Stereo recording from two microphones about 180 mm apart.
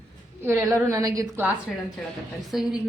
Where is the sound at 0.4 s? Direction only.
15° right (ahead or behind).